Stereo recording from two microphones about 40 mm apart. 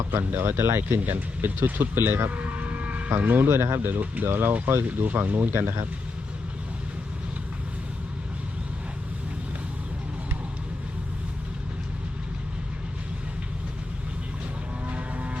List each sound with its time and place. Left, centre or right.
0.1 s speech: right
0.9 s speech: right
2.3 s a sound: right
3.2 s speech: right
3.9 s speech: right
4.3 s speech: right
4.9 s speech: right
5.5 s speech: right
14.8 s vehicle: right